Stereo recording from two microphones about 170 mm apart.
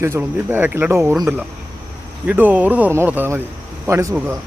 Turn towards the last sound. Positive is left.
turn(degrees=-15)  # may be behind; listen again after turning